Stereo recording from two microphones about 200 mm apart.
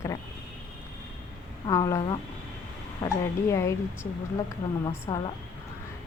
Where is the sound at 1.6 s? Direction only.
20° left (ahead or behind).